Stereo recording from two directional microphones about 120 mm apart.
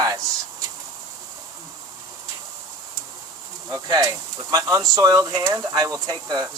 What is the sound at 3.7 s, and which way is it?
Speech, 35° right (ahead or behind).